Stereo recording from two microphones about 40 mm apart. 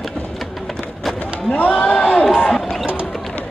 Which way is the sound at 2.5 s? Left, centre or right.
Centre.